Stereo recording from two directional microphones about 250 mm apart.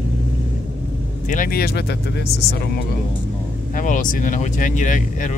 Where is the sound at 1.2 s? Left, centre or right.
Left.